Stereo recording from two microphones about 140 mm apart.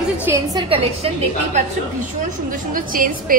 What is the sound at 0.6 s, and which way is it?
A woman's voice, 45° right (ahead or behind).